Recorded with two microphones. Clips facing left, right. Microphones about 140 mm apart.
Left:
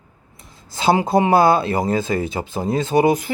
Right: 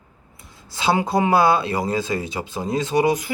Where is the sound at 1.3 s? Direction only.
50° left (ahead or behind).